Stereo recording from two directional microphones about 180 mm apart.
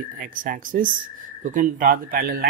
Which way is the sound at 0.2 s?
50° right (ahead or behind).